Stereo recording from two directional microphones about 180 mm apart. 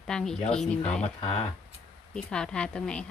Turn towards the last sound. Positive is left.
turn(degrees=5)  # may be behind; listen again after turning